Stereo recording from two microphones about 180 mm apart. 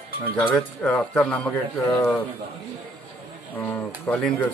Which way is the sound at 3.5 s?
10° left (ahead or behind).